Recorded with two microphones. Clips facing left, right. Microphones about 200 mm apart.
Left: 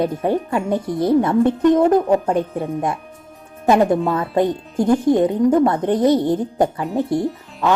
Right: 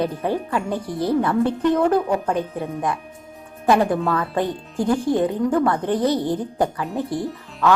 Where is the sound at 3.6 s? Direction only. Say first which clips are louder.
Left 3 dB; 25° left (ahead or behind).